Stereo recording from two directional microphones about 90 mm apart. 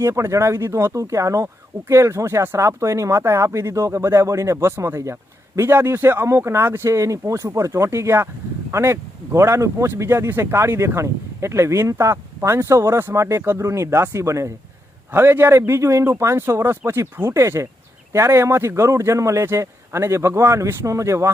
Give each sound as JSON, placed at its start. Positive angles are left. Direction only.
{"t": 0.0, "sound": "speech", "side_deg": -35}